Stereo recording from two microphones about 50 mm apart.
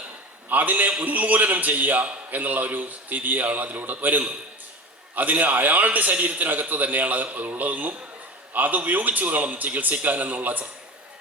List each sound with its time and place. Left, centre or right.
0.4 s a man's voice: right